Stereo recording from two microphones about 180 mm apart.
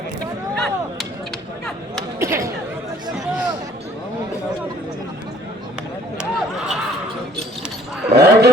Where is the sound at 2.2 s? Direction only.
15° right (ahead or behind).